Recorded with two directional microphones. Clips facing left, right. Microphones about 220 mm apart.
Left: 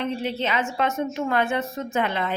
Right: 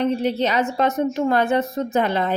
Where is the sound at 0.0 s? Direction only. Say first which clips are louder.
Right 6 dB; 40° right (ahead or behind).